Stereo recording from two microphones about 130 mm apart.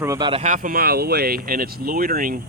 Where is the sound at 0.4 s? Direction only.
80° right.